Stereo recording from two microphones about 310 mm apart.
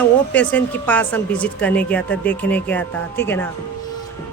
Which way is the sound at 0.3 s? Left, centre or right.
Centre.